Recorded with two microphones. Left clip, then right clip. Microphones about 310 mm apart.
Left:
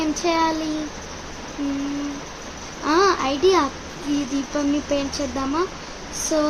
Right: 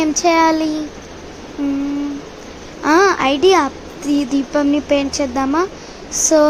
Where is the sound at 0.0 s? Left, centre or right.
Right.